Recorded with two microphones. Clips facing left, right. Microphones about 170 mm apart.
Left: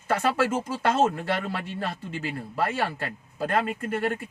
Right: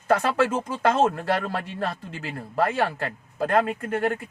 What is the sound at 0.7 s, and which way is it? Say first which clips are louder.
Speech: right 2 dB; 50° right (ahead or behind).